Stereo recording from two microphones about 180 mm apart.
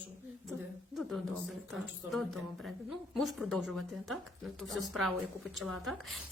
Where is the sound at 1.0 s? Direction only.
Centre (ahead or behind).